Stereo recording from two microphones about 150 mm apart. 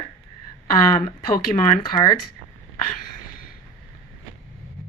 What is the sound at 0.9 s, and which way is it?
Speech, 75° left (ahead or behind).